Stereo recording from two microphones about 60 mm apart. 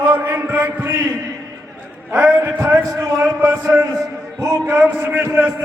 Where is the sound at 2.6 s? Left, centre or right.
Right.